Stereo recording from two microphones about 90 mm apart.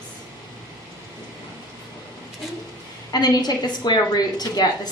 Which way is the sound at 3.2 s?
50° left (ahead or behind).